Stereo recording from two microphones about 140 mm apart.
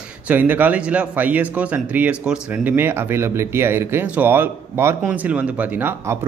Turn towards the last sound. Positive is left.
turn(degrees=-15)  # may be behind; listen again after turning